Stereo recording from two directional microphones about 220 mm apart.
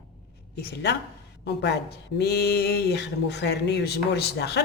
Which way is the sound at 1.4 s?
50° left (ahead or behind).